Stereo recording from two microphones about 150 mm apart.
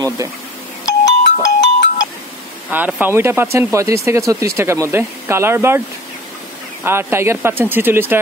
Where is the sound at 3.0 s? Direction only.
15° right (ahead or behind).